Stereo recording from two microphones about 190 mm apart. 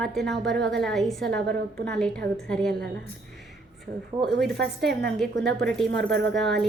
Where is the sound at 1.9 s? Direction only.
5° left (ahead or behind).